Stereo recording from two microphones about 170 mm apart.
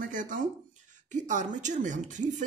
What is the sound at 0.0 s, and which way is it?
Speech, 50° right (ahead or behind).